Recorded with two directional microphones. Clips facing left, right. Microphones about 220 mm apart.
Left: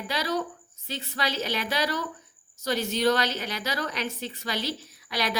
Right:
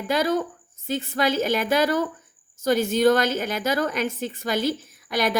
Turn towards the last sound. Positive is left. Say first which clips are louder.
# right 6 dB
turn(degrees=-50)  # may be behind; listen again after turning